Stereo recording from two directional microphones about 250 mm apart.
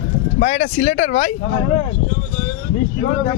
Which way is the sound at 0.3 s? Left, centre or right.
Left.